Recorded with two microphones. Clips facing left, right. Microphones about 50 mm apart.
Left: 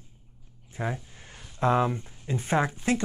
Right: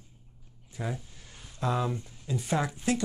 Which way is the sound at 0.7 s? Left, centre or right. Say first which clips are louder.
Left 4 dB; left.